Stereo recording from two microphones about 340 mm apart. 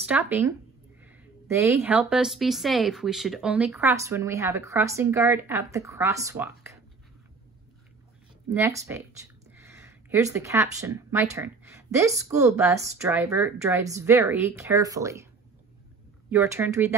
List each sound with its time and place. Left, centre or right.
0.0 s a woman's voice: centre
8.5 s a woman's voice: centre
16.3 s a woman's voice: centre